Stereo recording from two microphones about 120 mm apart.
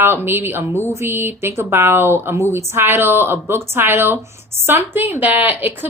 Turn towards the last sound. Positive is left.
turn(degrees=-15)  # may be behind; listen again after turning